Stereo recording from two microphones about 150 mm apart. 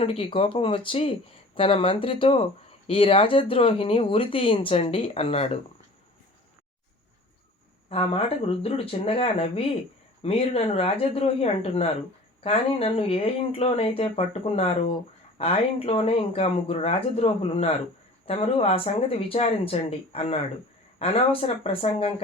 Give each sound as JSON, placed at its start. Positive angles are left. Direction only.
{"t": 0.0, "sound": "speech", "side_deg": 40}
{"t": 7.9, "sound": "speech", "side_deg": 40}